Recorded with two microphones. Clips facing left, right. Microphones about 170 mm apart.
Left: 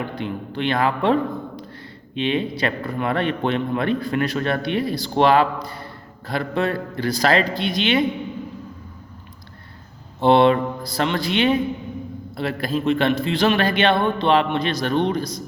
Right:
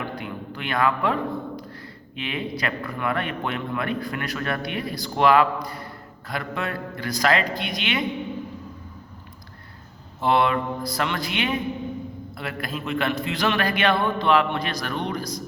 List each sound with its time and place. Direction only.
0.2 s a sound: 25° left (ahead or behind)
2.1 s a man's voice: 25° left (ahead or behind)
10.2 s a man's voice: 30° left (ahead or behind)